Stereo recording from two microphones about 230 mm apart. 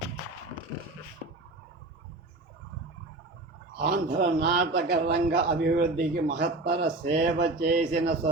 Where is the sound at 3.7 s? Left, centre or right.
Right.